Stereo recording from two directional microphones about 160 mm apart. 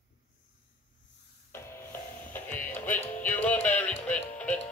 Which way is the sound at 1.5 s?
15° left (ahead or behind).